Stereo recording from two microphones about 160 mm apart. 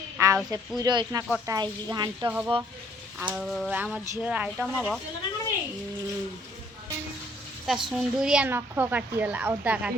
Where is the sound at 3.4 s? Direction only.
Centre (ahead or behind).